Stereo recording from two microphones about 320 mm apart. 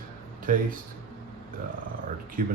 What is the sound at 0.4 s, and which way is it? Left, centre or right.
Speech, right.